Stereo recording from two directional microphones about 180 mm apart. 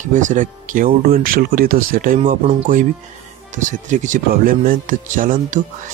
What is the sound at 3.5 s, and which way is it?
Speech, 45° right (ahead or behind).